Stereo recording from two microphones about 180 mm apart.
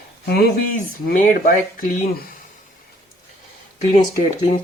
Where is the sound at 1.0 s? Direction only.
45° left (ahead or behind).